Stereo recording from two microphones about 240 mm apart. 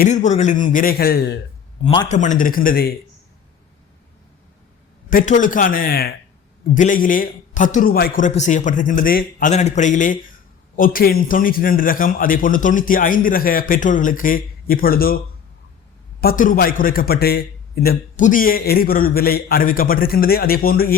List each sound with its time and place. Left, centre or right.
0.0 s a man's voice: left
1.8 s a man's voice: left
5.0 s a man's voice: left
16.2 s a man's voice: left